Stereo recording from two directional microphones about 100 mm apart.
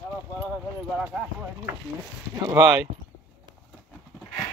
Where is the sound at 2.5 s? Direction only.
45° right (ahead or behind).